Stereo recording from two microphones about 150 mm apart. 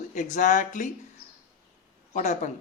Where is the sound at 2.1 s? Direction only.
55° left (ahead or behind).